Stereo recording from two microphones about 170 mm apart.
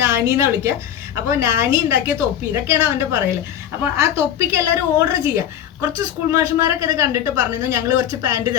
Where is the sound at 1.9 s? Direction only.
15° right (ahead or behind).